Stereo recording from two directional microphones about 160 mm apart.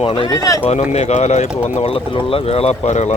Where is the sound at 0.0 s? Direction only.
35° left (ahead or behind).